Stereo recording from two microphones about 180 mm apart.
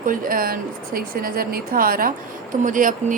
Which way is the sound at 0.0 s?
50° right (ahead or behind).